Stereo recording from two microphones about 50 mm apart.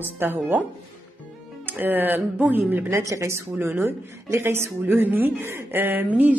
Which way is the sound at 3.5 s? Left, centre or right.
Right.